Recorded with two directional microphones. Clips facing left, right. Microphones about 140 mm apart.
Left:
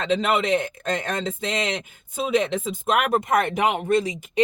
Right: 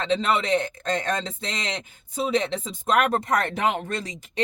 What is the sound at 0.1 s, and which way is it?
Speech, 10° left (ahead or behind).